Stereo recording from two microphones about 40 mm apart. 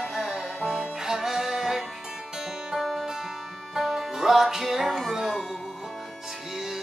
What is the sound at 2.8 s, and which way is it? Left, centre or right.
Music, centre.